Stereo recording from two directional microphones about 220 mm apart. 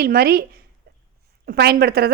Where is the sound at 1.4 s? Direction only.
45° right (ahead or behind).